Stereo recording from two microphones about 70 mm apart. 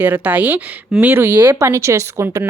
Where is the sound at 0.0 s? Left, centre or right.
Right.